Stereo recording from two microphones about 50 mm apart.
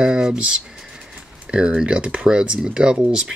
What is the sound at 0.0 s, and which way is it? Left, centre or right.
Speech, centre.